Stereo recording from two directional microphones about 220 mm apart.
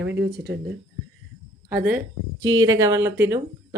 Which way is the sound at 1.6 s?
5° right (ahead or behind).